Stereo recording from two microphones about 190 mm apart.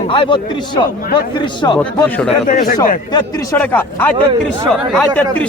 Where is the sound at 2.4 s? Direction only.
40° left (ahead or behind).